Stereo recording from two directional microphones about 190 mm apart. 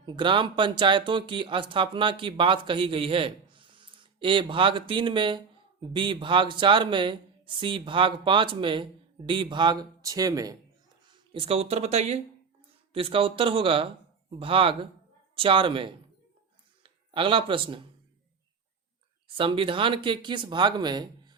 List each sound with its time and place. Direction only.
0.0 s speech: 25° right (ahead or behind)
11.3 s speech: 30° right (ahead or behind)
19.4 s speech: 25° right (ahead or behind)